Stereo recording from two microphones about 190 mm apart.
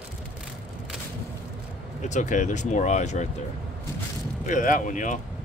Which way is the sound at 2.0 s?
40° left (ahead or behind).